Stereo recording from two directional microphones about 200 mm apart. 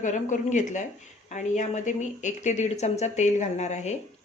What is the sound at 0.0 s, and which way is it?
A woman's voice, 40° left (ahead or behind).